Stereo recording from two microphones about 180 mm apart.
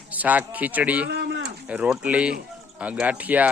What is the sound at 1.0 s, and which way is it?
Speech, 70° right (ahead or behind).